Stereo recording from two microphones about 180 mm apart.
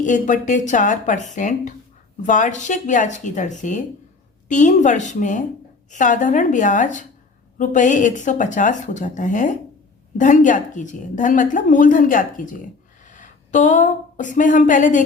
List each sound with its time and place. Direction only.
0.0 s a woman's voice: 45° left (ahead or behind)